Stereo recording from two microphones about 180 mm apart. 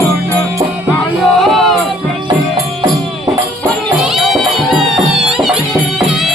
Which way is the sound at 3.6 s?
Centre (ahead or behind).